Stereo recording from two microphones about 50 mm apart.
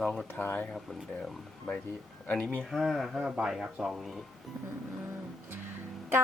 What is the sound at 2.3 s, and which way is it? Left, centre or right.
Speech, centre.